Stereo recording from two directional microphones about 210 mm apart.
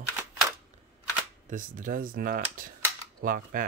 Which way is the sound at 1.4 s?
40° right (ahead or behind).